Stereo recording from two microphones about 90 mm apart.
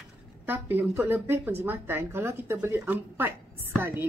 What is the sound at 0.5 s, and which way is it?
A woman's voice, 25° right (ahead or behind).